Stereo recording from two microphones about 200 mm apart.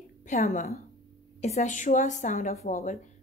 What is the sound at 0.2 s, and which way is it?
A woman's voice, 35° left (ahead or behind).